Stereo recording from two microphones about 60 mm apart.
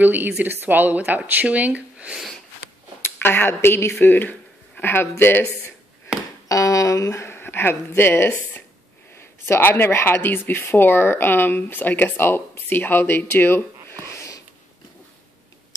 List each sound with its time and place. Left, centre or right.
0.0 s a woman's voice: right
3.0 s speech: left
6.5 s a sound: left
9.1 s speech: left